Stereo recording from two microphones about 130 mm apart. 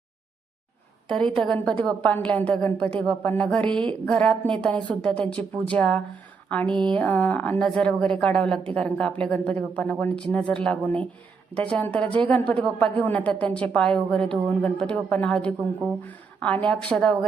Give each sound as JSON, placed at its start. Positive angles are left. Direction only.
{"t": 1.0, "sound": "a woman's voice", "side_deg": 5}
{"t": 6.7, "sound": "speech", "side_deg": -40}
{"t": 6.9, "sound": "a woman's voice", "side_deg": 10}